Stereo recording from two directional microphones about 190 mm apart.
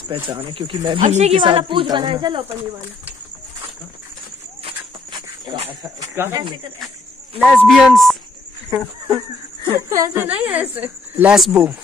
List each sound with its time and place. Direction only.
0.1 s speech: 30° right (ahead or behind)
5.7 s speech: 15° right (ahead or behind)
7.3 s speech: 5° left (ahead or behind)
8.6 s speech: 20° right (ahead or behind)